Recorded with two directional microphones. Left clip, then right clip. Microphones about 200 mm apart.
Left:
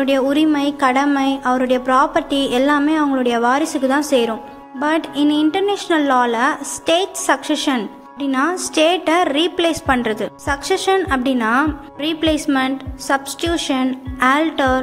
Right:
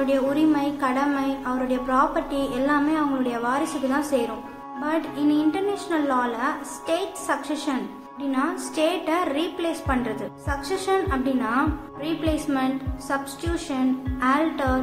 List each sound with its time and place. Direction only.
0.0 s a woman's voice: 40° left (ahead or behind)